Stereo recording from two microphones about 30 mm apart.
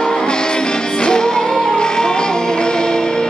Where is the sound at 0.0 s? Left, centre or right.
Left.